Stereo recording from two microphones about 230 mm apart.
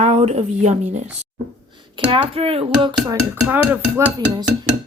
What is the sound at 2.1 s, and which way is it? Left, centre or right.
Speech, right.